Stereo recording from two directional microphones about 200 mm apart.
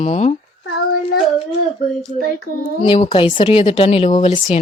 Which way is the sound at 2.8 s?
30° left (ahead or behind).